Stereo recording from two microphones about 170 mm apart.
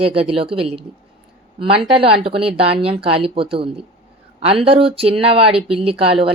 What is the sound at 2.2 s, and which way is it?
A man's voice, 35° right (ahead or behind).